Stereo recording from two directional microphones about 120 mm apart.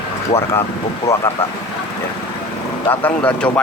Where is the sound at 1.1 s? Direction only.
25° left (ahead or behind).